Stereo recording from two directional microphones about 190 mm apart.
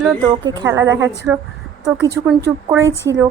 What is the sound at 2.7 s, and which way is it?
Speech, 15° right (ahead or behind).